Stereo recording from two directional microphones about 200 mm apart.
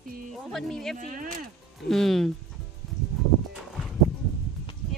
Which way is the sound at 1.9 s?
Centre (ahead or behind).